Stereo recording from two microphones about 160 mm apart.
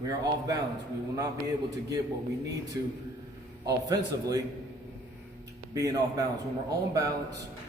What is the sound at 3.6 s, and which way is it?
Speech, 20° right (ahead or behind).